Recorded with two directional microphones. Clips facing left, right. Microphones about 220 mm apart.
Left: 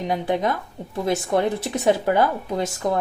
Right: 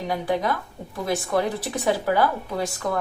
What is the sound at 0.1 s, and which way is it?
Speech, 25° left (ahead or behind).